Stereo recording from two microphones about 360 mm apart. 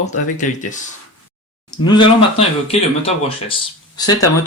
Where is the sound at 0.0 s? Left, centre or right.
Left.